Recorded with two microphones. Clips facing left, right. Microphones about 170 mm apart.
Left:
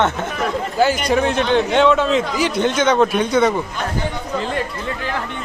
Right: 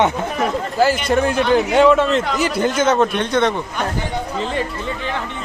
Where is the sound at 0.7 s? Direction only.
Centre (ahead or behind).